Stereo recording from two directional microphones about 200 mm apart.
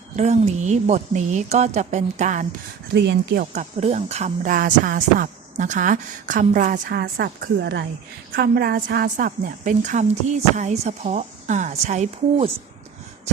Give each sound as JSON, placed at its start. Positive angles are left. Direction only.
{"t": 0.2, "sound": "speech", "side_deg": -35}
{"t": 2.9, "sound": "speech", "side_deg": -55}
{"t": 3.5, "sound": "speech", "side_deg": -35}